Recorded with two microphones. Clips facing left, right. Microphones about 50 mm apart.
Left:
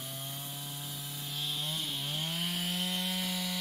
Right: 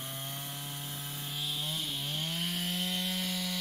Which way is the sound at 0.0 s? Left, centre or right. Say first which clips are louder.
Right 1 dB; right.